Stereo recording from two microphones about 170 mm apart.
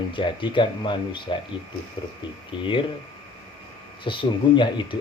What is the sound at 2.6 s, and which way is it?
Speech, 30° left (ahead or behind).